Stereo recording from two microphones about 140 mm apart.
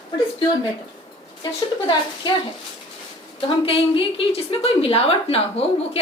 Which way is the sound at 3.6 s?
40° left (ahead or behind).